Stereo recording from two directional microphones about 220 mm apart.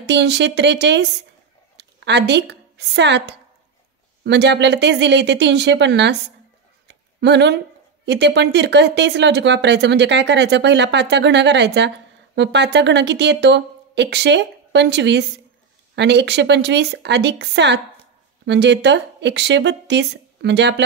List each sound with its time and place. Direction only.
0.0 s a woman's voice: 50° right (ahead or behind)